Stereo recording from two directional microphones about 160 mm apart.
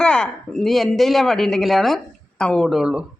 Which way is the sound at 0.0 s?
5° left (ahead or behind).